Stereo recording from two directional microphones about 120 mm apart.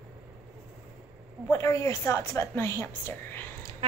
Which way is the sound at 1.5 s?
25° left (ahead or behind).